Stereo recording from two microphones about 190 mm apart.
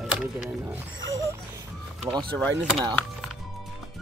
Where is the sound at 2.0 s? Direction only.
20° right (ahead or behind).